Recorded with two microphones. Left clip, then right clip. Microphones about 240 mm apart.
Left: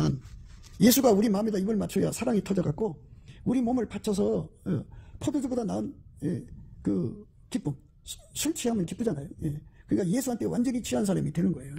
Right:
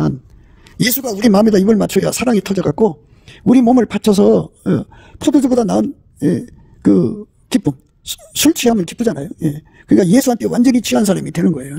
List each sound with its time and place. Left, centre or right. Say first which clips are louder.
0.8 s a man's voice: right 2 dB; centre
1.2 s speech: right 17 dB; right